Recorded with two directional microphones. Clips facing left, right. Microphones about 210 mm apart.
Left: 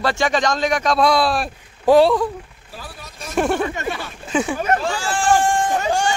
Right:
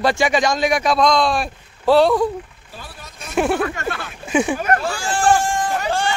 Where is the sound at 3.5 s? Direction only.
15° left (ahead or behind).